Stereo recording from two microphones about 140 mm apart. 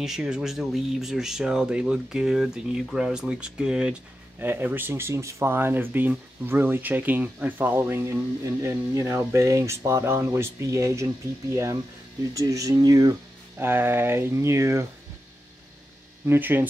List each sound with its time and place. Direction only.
0.0 s speech: 5° right (ahead or behind); by 13.1 s 30° right (ahead or behind)
13.6 s speech: 15° right (ahead or behind)
16.3 s speech: 15° right (ahead or behind)